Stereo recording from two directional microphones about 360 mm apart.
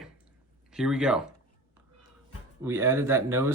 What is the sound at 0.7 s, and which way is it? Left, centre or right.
Speech, centre.